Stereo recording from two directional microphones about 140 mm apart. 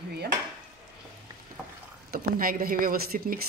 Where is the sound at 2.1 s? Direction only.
90° right.